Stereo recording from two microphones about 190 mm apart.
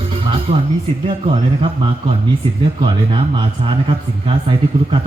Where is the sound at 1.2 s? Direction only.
30° right (ahead or behind).